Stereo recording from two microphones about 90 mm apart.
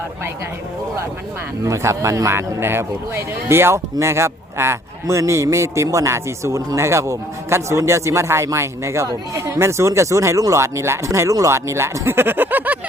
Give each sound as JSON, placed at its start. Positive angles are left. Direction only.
{"t": 1.6, "sound": "a man's voice", "side_deg": -30}